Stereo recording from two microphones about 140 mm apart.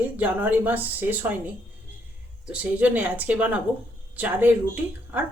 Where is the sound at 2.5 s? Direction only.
10° right (ahead or behind).